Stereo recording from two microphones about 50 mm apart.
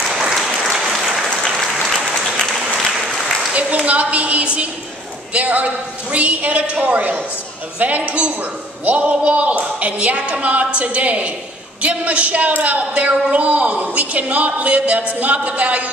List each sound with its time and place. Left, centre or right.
0.3 s applause: centre
3.5 s speech: right